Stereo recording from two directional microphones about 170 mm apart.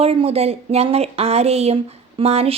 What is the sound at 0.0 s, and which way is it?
Speech, 35° right (ahead or behind).